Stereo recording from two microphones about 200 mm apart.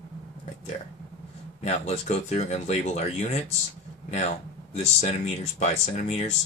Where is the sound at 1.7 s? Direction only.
35° left (ahead or behind).